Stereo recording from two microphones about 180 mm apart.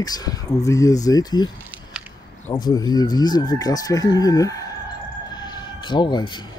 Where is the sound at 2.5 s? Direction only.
20° left (ahead or behind).